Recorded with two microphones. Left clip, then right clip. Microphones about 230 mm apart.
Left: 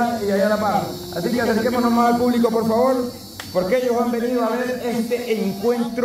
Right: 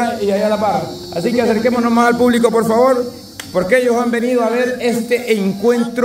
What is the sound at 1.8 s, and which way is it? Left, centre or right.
A man's voice, right.